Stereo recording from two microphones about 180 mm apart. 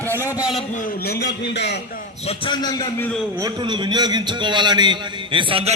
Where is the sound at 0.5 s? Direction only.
45° left (ahead or behind); by 1.8 s 70° left (ahead or behind).